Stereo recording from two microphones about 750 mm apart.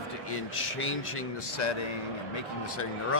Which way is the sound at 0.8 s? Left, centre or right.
Centre.